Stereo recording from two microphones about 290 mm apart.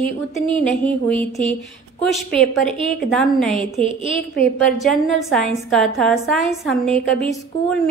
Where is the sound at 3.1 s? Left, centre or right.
Centre.